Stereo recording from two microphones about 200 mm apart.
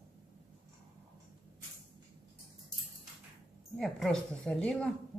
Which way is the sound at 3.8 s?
5° left (ahead or behind).